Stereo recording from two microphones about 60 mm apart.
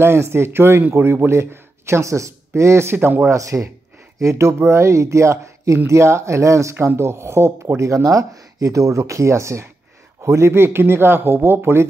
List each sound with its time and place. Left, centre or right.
0.0 s speech: right
3.3 s speech: right
4.6 s speech: right